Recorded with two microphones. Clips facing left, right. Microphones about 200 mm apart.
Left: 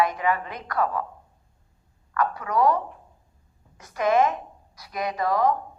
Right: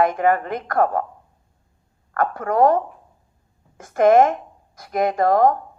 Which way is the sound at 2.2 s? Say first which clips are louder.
Right 5 dB; 50° right (ahead or behind).